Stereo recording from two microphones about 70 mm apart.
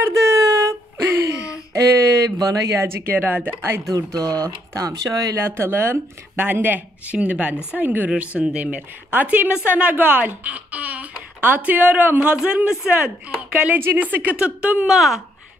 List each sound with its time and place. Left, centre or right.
0.0 s a sound: right
2.3 s speech: right
2.8 s speech: right
4.2 s speech: right
5.6 s speech: right; by 13.7 s centre
13.7 s speech: right
14.9 s speech: centre